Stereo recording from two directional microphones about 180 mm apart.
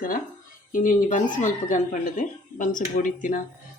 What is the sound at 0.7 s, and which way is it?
Speech, 45° left (ahead or behind).